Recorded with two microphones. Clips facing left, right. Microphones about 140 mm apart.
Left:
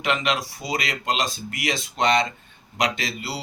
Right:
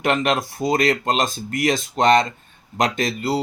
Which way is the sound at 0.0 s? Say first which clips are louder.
Right 4 dB; 50° right (ahead or behind).